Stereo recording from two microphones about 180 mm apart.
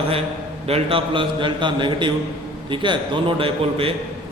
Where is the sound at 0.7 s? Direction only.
30° right (ahead or behind).